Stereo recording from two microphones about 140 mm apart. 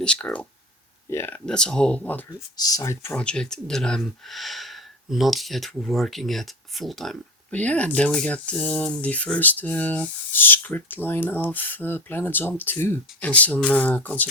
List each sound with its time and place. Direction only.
0.0 s speech: 5° left (ahead or behind)
2.6 s speech: 25° left (ahead or behind)